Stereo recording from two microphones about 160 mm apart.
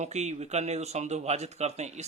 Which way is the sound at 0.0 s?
45° right (ahead or behind).